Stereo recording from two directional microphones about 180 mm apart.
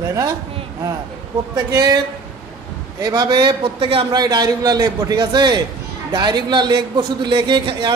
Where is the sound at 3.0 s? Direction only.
20° right (ahead or behind).